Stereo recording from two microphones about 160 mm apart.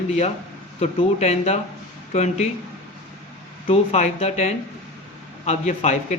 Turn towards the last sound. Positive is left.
turn(degrees=45)  # may be behind; listen again after turning